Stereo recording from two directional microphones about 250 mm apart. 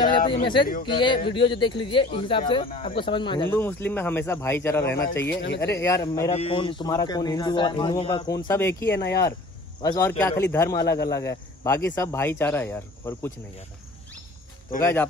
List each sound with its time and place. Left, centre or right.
0.3 s speech: centre
3.5 s a man's voice: centre
5.4 s speech: left
5.7 s a man's voice: centre
6.3 s a man's voice: left
14.8 s a man's voice: centre